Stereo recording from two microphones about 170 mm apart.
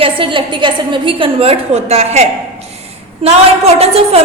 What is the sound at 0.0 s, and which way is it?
A woman's voice, 30° right (ahead or behind).